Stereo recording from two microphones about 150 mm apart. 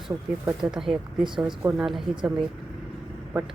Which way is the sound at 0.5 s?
5° right (ahead or behind).